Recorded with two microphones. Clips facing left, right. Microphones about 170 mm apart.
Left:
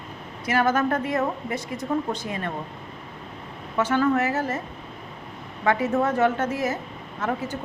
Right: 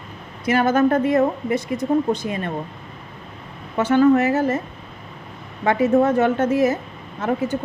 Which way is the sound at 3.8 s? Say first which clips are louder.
Right 6 dB; 20° right (ahead or behind).